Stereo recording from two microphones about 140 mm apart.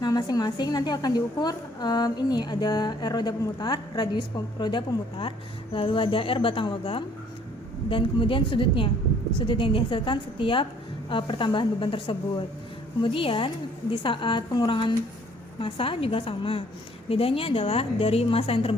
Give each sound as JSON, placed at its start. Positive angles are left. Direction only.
{"t": 0.0, "sound": "a woman's voice", "side_deg": 30}